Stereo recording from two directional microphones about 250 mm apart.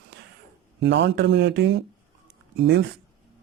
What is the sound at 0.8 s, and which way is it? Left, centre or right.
Speech, right.